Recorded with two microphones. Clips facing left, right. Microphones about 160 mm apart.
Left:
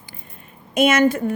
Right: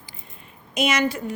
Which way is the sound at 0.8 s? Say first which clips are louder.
Left 7 dB; 50° left (ahead or behind).